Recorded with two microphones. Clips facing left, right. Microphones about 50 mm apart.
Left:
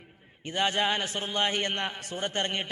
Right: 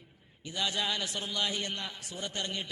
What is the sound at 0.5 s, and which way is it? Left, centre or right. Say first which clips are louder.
A man's voice: left 6 dB; left.